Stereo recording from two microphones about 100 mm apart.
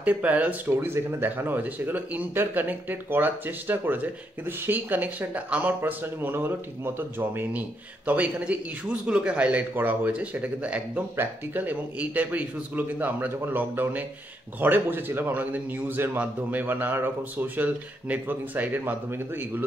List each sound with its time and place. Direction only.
0.0 s speech: 15° right (ahead or behind)